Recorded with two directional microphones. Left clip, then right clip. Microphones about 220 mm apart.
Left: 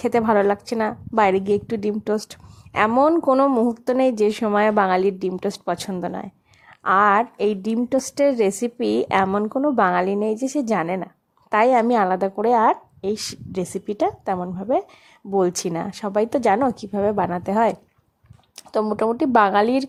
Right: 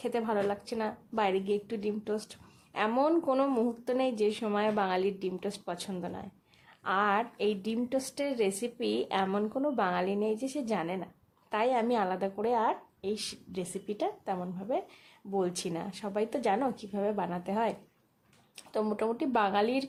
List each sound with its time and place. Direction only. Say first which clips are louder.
0.0 s a woman's voice: left 13 dB; 35° left (ahead or behind)